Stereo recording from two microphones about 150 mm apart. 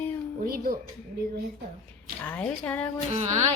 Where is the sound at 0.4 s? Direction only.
75° right (ahead or behind).